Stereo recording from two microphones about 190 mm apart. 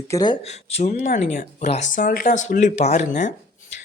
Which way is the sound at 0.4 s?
35° left (ahead or behind).